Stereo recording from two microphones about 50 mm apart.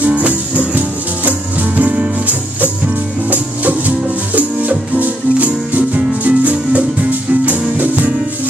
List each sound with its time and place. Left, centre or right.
0.0 s music: right